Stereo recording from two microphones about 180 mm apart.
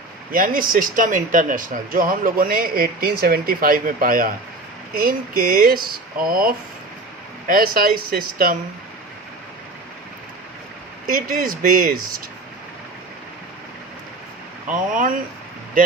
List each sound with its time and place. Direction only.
0.3 s speech: 50° right (ahead or behind)
11.1 s speech: 50° right (ahead or behind)
14.7 s speech: 45° right (ahead or behind)